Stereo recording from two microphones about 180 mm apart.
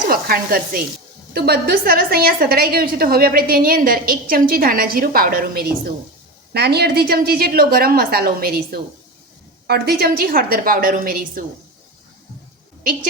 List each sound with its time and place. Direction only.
0.1 s a woman's voice: 55° right (ahead or behind)